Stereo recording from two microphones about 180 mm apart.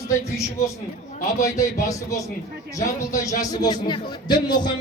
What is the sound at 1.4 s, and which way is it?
Speech, 20° left (ahead or behind).